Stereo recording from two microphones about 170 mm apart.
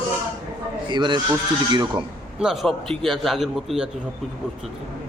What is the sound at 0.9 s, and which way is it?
A man's voice, 25° right (ahead or behind).